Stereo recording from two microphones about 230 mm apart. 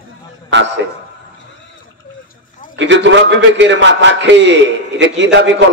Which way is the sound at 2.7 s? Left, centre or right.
Right.